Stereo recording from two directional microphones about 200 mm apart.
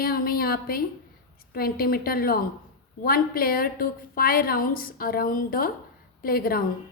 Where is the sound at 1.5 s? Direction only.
50° left (ahead or behind).